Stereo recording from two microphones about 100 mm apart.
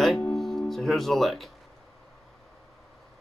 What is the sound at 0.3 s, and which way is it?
Music, 5° left (ahead or behind).